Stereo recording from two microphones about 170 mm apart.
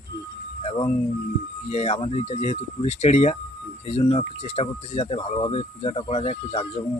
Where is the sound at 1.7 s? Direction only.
40° left (ahead or behind).